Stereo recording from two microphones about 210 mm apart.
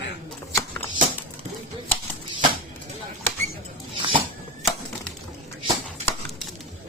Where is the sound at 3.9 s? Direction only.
25° right (ahead or behind).